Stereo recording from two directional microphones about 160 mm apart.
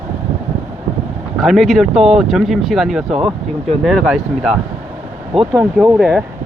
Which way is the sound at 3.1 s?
40° right (ahead or behind).